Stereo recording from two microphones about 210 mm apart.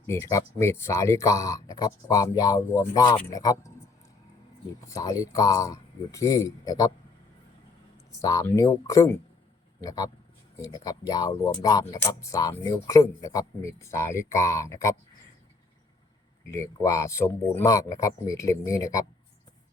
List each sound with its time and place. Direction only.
0.1 s speech: 15° left (ahead or behind)
4.9 s speech: 15° left (ahead or behind)
8.2 s speech: 15° left (ahead or behind)
16.5 s speech: 15° left (ahead or behind)